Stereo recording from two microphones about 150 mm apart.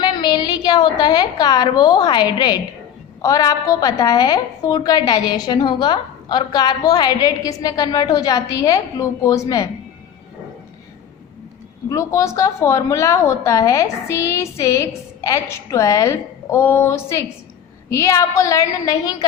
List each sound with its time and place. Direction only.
0.0 s a woman's voice: 30° left (ahead or behind)
11.9 s a woman's voice: 20° left (ahead or behind)